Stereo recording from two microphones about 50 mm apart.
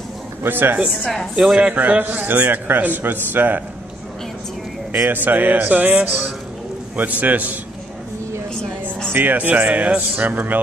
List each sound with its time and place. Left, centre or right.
0.4 s a man's voice: right
1.3 s a man's voice: centre; by 3.6 s right
5.0 s a man's voice: right
7.0 s a man's voice: right
9.1 s a man's voice: right